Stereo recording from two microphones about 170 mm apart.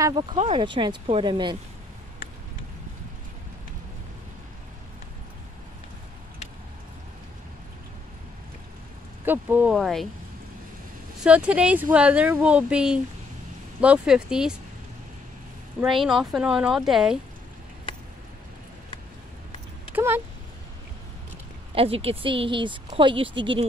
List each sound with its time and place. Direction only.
0.0 s speech: 25° right (ahead or behind)
9.2 s speech: 10° right (ahead or behind)
11.2 s speech: 5° right (ahead or behind)
15.8 s speech: centre (ahead or behind)
19.9 s a sound: 15° right (ahead or behind)
21.7 s speech: 35° right (ahead or behind)